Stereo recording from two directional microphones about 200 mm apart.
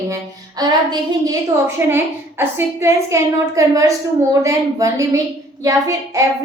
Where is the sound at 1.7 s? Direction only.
10° right (ahead or behind).